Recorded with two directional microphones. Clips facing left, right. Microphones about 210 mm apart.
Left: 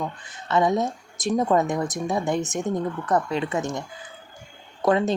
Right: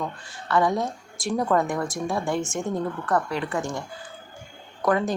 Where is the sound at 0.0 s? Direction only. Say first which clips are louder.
Left 1 dB; 20° left (ahead or behind).